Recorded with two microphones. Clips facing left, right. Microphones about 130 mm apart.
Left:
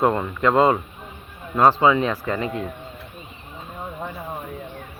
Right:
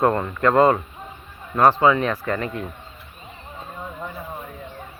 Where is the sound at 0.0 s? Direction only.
10° left (ahead or behind).